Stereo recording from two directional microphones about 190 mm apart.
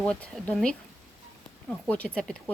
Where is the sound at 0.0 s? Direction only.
5° left (ahead or behind).